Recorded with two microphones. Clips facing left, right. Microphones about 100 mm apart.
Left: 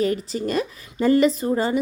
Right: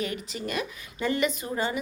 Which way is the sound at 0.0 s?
35° left (ahead or behind).